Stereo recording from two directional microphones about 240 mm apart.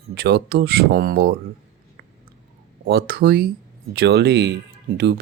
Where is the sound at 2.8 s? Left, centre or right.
Right.